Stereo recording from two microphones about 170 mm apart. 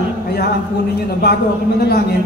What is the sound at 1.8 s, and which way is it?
Speech, 70° left (ahead or behind).